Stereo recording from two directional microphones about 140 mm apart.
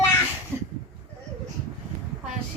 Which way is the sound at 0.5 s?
15° right (ahead or behind).